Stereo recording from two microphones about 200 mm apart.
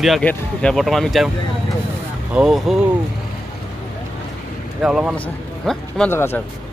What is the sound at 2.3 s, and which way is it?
Speech, centre (ahead or behind).